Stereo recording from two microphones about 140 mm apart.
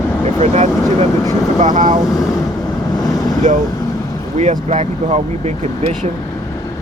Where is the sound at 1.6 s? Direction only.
65° right (ahead or behind).